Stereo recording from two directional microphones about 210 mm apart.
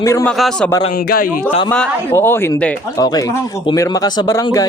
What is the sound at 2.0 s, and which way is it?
Speech, 10° left (ahead or behind).